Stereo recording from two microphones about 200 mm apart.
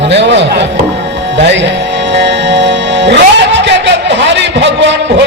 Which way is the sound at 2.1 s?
60° right (ahead or behind).